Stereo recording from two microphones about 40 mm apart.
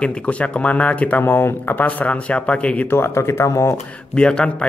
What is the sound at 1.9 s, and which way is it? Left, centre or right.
Speech, left.